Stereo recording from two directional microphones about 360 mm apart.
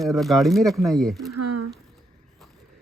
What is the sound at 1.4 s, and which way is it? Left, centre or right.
Speech, right.